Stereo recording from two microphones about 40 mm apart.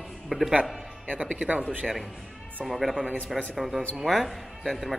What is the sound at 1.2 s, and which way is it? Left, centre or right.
Speech, right.